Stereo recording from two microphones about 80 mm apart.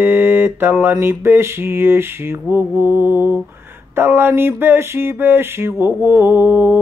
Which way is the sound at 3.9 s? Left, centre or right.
Right.